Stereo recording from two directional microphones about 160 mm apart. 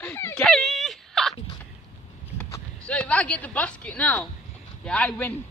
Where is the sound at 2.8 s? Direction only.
5° left (ahead or behind).